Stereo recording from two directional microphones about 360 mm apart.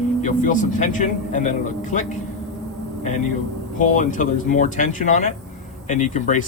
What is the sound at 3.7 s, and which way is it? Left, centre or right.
Speech, left.